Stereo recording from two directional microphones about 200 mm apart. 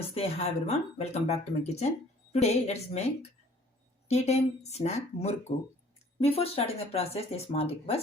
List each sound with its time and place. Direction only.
0.1 s speech: 30° left (ahead or behind)
4.1 s speech: 35° left (ahead or behind)